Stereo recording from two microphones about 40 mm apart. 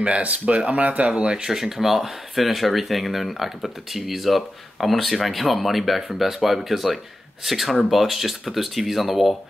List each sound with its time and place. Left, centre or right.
0.0 s speech: right
1.1 s speech: centre